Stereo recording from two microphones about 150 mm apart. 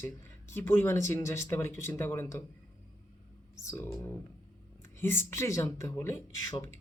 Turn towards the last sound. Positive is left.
turn(degrees=20)  # may be behind; listen again after turning